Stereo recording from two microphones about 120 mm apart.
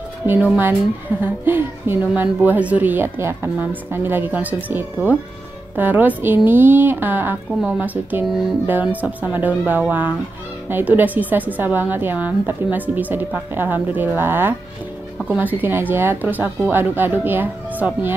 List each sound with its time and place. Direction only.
0.3 s a woman's voice: 15° right (ahead or behind)